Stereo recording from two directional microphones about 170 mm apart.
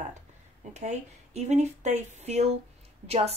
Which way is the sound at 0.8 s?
45° right (ahead or behind).